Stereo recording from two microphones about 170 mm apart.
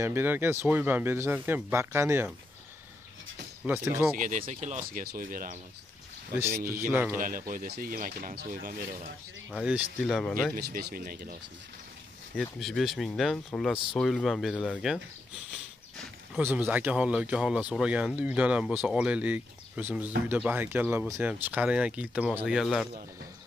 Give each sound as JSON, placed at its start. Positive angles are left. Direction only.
{"t": 0.0, "sound": "speech", "side_deg": -15}
{"t": 3.6, "sound": "speech", "side_deg": -10}
{"t": 4.2, "sound": "speech", "side_deg": -50}
{"t": 6.9, "sound": "speech", "side_deg": -10}
{"t": 7.2, "sound": "speech", "side_deg": -55}
{"t": 9.5, "sound": "speech", "side_deg": -5}
{"t": 10.5, "sound": "speech", "side_deg": -65}
{"t": 12.4, "sound": "speech", "side_deg": 0}
{"t": 16.3, "sound": "speech", "side_deg": -10}